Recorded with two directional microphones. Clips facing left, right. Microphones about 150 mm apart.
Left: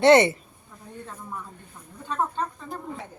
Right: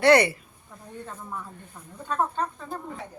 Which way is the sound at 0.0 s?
25° left (ahead or behind).